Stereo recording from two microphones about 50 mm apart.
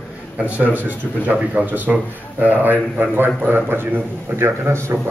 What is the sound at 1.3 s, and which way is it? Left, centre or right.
A man's voice, right.